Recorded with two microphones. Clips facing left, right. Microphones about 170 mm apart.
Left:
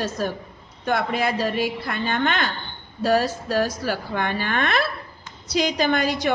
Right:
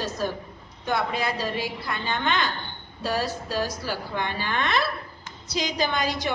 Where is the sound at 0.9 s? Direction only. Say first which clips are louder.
Left 4 dB; 55° left (ahead or behind).